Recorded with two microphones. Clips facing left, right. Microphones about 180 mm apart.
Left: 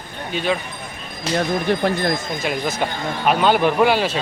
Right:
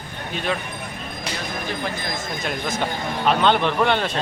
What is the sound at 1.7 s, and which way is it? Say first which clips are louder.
Speech: left 9 dB; 60° left (ahead or behind).